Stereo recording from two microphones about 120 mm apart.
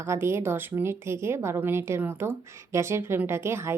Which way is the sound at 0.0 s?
20° right (ahead or behind).